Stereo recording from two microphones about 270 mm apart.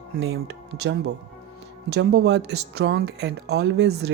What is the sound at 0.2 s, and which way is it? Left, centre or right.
Speech, right.